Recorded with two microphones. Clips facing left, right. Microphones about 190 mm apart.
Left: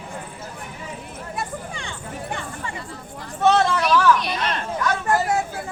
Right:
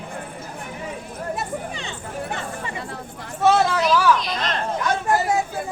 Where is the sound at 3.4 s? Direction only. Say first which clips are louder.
Even; 5° right (ahead or behind).